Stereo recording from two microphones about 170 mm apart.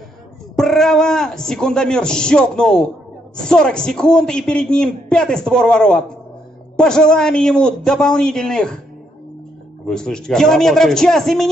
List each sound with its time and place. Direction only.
0.6 s a man's voice: centre (ahead or behind)
9.8 s a man's voice: 5° left (ahead or behind)